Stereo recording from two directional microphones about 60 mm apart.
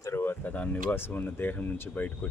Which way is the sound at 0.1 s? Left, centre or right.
Left.